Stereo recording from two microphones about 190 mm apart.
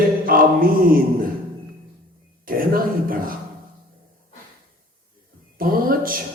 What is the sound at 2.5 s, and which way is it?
Speech, 50° right (ahead or behind).